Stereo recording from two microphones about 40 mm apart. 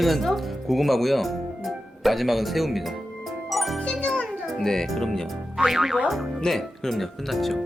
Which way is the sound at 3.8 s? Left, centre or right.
Left.